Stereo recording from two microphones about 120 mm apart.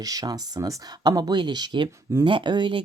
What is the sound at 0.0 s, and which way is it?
Speech, 30° right (ahead or behind).